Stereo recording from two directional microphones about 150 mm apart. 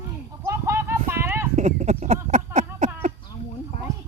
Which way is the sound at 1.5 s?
50° right (ahead or behind).